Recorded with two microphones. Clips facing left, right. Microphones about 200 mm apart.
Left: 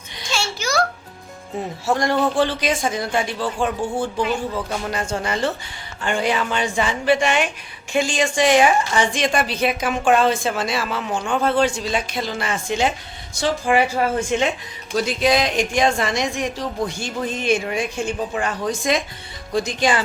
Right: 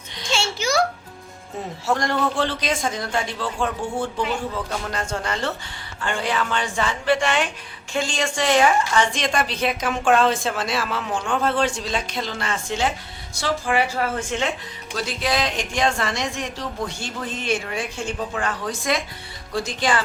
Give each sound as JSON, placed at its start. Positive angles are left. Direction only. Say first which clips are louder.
{"t": 0.3, "sound": "a sound", "louder": "right 1 dB", "side_deg": -25}
{"t": 1.9, "sound": "a woman's voice", "louder": "left 3 dB", "side_deg": 10}
{"t": 4.9, "sound": "a woman's voice", "louder": "left 3 dB", "side_deg": 10}